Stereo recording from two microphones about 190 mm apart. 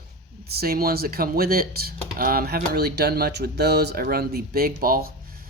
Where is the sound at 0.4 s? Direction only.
55° right (ahead or behind).